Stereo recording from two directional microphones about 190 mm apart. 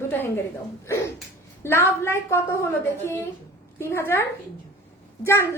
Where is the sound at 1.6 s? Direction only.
10° left (ahead or behind).